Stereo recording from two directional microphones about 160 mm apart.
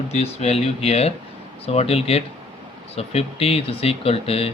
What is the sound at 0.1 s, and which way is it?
Speech, 40° left (ahead or behind).